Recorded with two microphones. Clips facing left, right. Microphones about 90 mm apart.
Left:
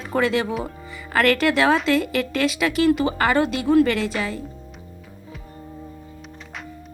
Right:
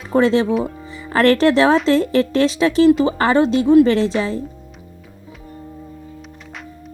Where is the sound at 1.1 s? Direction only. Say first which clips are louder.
Right 5 dB; 30° right (ahead or behind).